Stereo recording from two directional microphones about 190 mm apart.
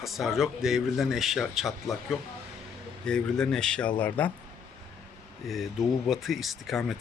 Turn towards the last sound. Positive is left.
turn(degrees=0)  # may be behind; listen again after turning